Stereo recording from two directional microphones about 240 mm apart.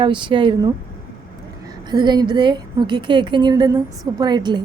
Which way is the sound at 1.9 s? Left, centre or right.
Centre.